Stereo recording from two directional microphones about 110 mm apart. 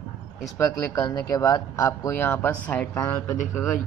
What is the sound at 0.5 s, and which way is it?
Speech, 30° left (ahead or behind).